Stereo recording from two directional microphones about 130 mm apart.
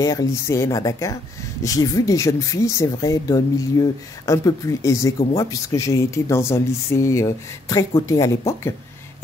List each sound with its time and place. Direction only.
0.0 s speech: 25° left (ahead or behind)